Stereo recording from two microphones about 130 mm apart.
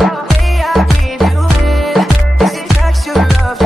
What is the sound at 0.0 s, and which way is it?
Music, centre (ahead or behind).